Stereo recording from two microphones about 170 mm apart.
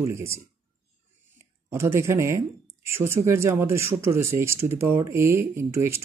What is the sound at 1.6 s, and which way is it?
Speech, 15° right (ahead or behind).